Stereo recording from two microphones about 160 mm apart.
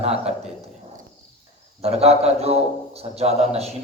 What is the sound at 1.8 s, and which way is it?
A man's voice, 40° right (ahead or behind).